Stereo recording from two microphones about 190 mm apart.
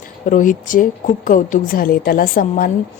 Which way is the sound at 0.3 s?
45° left (ahead or behind).